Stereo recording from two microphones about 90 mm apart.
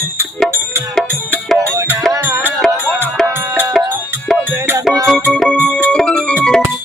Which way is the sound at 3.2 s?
5° left (ahead or behind).